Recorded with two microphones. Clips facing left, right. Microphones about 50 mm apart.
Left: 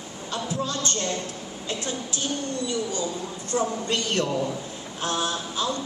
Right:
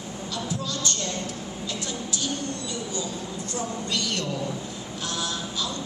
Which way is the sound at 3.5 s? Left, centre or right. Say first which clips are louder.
Left 5 dB; left.